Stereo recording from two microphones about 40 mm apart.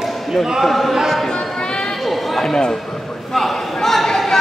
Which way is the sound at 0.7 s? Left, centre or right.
Centre.